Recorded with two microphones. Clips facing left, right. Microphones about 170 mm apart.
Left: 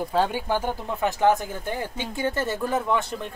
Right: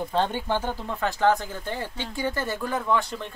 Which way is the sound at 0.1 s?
10° left (ahead or behind).